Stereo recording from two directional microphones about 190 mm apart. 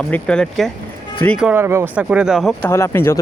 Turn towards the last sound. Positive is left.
turn(degrees=15)  # may be behind; listen again after turning